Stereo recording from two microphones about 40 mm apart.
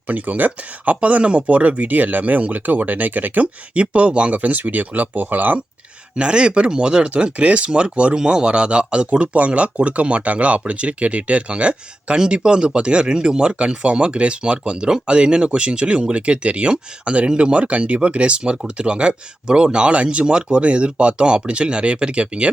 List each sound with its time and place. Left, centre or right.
0.1 s speech: right
3.4 s speech: right
6.1 s speech: right
9.1 s speech: right